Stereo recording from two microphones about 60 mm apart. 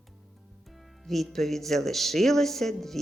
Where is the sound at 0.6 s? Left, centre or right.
Centre.